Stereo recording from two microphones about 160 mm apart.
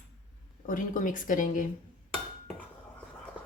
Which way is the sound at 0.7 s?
55° left (ahead or behind).